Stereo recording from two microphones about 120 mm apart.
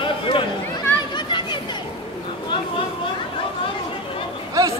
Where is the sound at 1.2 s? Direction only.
40° left (ahead or behind).